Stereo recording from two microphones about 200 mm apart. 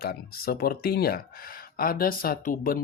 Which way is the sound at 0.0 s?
50° left (ahead or behind).